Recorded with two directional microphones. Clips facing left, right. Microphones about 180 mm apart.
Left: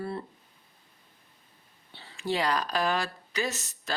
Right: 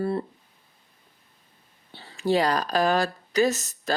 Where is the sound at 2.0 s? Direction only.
40° right (ahead or behind).